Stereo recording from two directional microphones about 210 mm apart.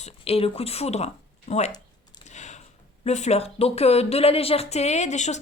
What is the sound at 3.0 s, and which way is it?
Speech, 30° left (ahead or behind).